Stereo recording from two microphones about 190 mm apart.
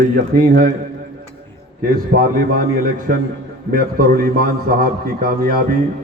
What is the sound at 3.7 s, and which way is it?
A man's voice, 50° right (ahead or behind).